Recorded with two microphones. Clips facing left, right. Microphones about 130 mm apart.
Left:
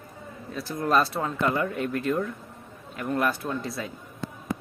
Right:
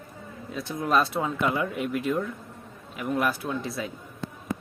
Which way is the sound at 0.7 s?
Centre (ahead or behind).